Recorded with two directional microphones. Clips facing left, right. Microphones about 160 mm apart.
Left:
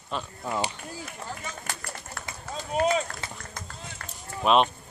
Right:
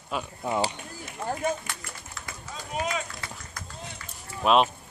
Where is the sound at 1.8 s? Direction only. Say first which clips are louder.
Left 3 dB; 55° left (ahead or behind).